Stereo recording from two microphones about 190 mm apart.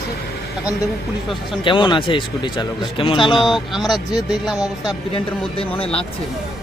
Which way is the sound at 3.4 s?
Centre (ahead or behind).